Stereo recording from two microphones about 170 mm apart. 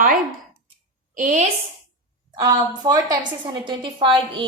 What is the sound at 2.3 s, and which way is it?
A woman's voice, 25° right (ahead or behind).